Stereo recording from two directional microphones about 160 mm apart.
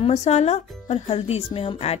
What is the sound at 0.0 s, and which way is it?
Speech, 45° left (ahead or behind).